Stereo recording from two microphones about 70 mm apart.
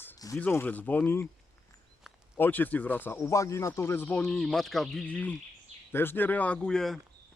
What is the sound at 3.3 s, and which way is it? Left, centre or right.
Speech, left.